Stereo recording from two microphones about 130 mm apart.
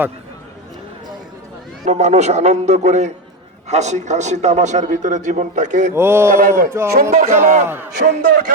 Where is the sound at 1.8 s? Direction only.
60° right (ahead or behind).